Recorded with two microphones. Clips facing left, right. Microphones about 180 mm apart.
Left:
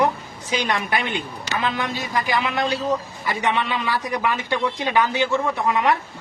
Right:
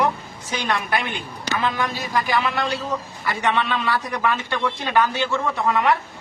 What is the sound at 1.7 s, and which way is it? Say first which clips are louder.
A man's voice: right 1 dB; 20° left (ahead or behind).